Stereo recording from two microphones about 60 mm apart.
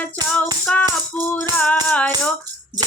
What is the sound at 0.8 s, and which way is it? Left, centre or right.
Music, left.